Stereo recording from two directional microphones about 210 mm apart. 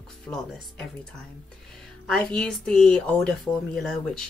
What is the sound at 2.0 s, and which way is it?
Speech, 5° left (ahead or behind).